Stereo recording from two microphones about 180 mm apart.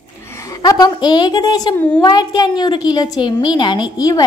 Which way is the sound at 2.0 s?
25° left (ahead or behind).